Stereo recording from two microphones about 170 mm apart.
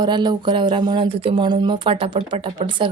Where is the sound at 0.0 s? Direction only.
25° right (ahead or behind).